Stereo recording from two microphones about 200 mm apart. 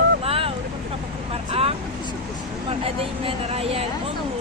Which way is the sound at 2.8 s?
30° right (ahead or behind).